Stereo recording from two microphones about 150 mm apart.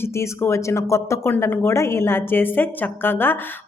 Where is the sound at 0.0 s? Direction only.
20° left (ahead or behind).